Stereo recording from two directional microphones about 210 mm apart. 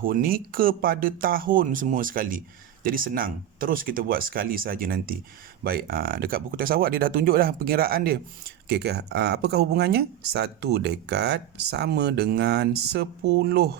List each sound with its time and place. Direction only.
0.0 s speech: 45° right (ahead or behind)